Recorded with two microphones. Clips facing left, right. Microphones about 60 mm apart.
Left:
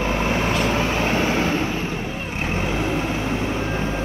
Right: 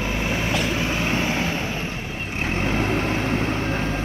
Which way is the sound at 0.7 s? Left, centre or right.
Centre.